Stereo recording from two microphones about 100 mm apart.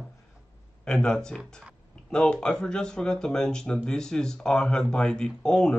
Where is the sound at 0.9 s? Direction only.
10° left (ahead or behind).